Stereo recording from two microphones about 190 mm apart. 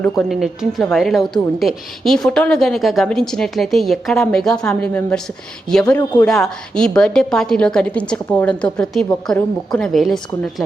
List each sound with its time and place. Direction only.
0.0 s a woman's voice: centre (ahead or behind)
6.2 s a woman's voice: 5° left (ahead or behind)